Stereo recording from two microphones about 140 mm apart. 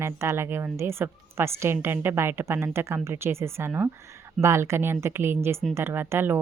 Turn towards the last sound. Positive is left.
turn(degrees=-15)  # may be behind; listen again after turning